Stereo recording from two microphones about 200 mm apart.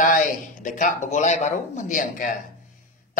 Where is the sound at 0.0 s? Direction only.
40° left (ahead or behind).